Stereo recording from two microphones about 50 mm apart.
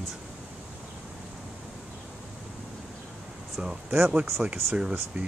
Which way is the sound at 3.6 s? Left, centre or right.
Centre.